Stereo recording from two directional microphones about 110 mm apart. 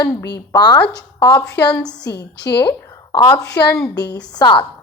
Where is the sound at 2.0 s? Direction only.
30° left (ahead or behind).